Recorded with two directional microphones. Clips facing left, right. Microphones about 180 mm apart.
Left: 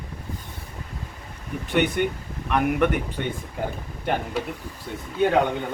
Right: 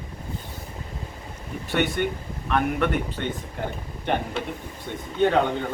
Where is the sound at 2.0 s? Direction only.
15° left (ahead or behind).